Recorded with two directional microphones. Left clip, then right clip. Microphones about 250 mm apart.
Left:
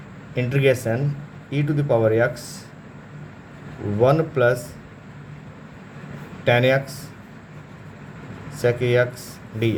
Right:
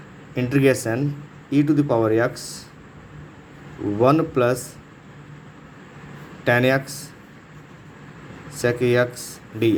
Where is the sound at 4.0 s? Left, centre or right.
Centre.